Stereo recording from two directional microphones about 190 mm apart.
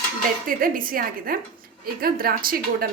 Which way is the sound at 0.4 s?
45° right (ahead or behind).